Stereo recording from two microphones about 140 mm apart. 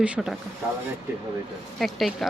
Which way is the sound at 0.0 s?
5° right (ahead or behind).